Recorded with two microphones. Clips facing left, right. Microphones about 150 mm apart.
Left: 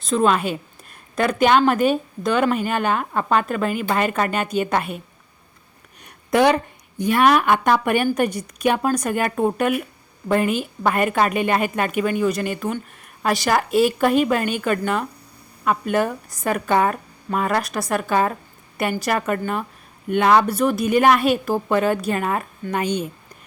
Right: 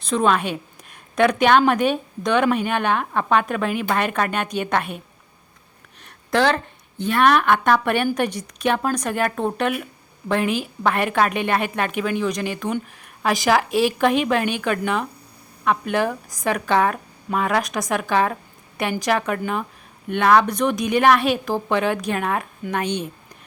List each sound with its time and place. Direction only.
0.0 s speech: centre (ahead or behind)
6.3 s a woman's voice: 10° left (ahead or behind)